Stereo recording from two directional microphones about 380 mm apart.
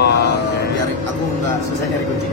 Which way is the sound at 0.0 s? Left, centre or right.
Left.